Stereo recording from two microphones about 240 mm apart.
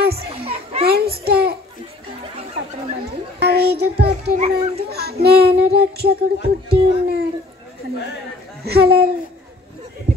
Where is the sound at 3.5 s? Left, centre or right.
Right.